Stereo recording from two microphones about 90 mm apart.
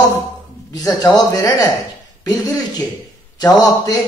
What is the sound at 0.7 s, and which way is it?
A man's voice, 40° left (ahead or behind).